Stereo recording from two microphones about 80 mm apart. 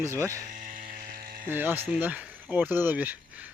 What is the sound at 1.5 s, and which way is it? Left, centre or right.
Speech, right.